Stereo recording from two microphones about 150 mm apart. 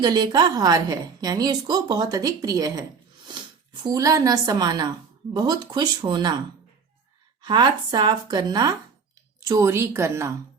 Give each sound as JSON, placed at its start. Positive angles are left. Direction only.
{"t": 0.0, "sound": "a woman's voice", "side_deg": -30}
{"t": 7.4, "sound": "a woman's voice", "side_deg": -30}